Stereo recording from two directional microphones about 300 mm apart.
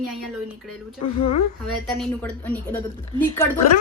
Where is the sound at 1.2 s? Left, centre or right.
Left.